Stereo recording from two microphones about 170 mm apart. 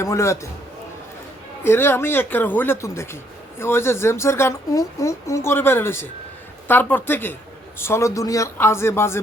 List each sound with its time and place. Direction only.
0.0 s speech: 15° left (ahead or behind)
1.6 s speech: 15° left (ahead or behind)